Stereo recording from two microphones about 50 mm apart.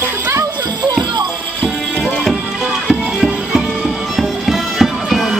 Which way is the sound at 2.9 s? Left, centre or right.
Centre.